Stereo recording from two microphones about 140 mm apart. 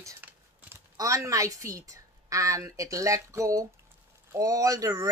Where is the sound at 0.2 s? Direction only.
15° right (ahead or behind).